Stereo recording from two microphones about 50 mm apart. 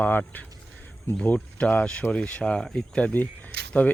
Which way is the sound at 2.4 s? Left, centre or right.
Centre.